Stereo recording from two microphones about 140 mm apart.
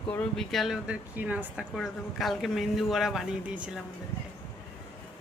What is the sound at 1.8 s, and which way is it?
A man's voice, centre (ahead or behind).